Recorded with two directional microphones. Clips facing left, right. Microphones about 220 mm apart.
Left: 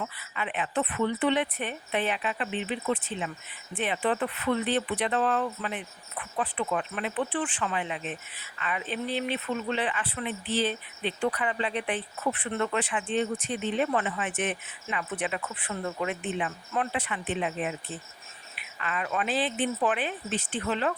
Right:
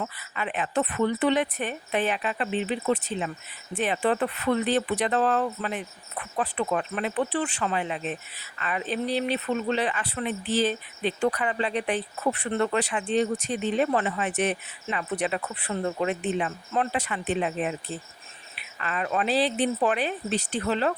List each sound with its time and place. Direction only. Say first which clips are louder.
0.0 s speech: right 2 dB; 45° right (ahead or behind)